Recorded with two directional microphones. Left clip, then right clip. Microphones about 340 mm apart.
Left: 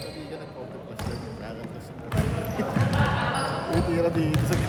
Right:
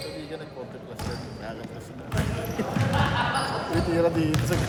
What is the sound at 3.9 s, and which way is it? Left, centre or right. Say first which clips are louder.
Speech: right 3 dB; right.